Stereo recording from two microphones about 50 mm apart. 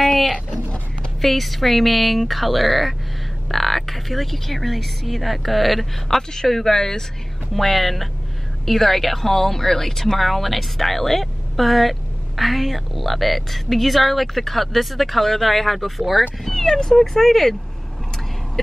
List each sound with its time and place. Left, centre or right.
0.3 s speech: left
1.2 s speech: centre